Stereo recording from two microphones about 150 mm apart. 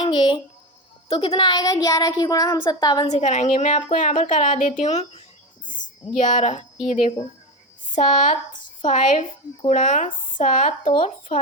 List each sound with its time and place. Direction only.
0.0 s speech: 30° left (ahead or behind)
3.1 s a woman's voice: 50° left (ahead or behind)
7.9 s a woman's voice: 55° left (ahead or behind)